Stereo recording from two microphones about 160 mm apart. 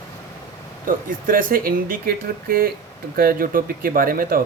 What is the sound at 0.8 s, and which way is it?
Speech, 60° right (ahead or behind).